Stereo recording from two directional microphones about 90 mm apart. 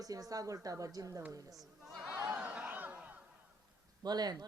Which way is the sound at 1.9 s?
5° right (ahead or behind).